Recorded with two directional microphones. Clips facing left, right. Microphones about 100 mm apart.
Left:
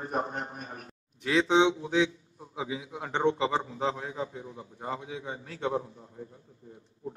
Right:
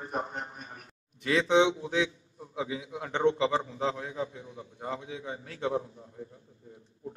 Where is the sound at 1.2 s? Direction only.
Centre (ahead or behind).